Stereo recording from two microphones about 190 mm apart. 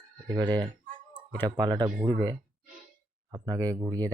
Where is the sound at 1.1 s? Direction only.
10° left (ahead or behind).